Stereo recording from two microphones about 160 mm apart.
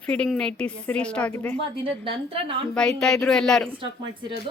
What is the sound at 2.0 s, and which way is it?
Speech, 35° right (ahead or behind).